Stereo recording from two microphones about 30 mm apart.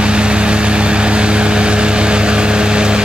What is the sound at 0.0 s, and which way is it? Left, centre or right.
Vehicle, right.